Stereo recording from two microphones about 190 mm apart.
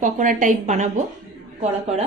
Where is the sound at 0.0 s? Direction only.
40° right (ahead or behind).